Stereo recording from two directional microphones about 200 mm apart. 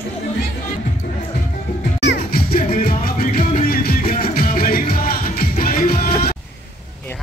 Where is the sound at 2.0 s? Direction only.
55° left (ahead or behind).